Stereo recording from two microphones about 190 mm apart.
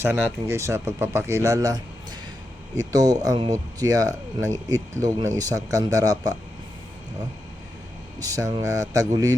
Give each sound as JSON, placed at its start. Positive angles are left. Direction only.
{"t": 0.0, "sound": "speech", "side_deg": -10}
{"t": 8.2, "sound": "speech", "side_deg": -20}